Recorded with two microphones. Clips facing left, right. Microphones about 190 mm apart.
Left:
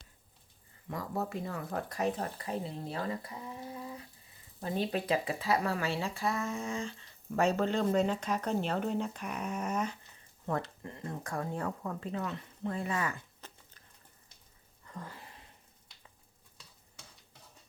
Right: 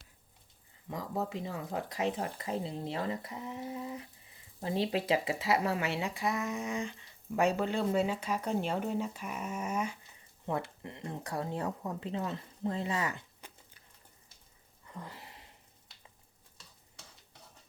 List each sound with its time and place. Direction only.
0.9 s speech: 15° right (ahead or behind)
10.8 s speech: 20° right (ahead or behind)
14.8 s a sound: 20° right (ahead or behind)